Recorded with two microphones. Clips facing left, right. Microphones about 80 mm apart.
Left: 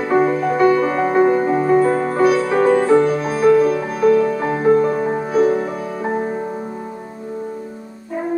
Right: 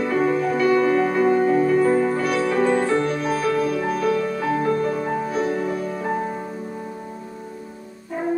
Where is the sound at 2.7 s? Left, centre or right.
Centre.